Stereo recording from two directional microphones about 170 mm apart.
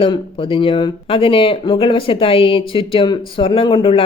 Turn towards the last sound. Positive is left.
turn(degrees=30)  # may be behind; listen again after turning